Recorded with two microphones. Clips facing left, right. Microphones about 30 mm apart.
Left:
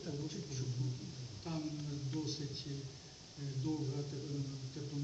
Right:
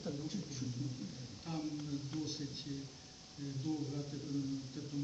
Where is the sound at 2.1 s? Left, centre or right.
Right.